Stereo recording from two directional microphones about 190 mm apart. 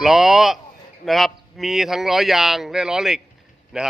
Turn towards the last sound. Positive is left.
turn(degrees=0)  # may be behind; listen again after turning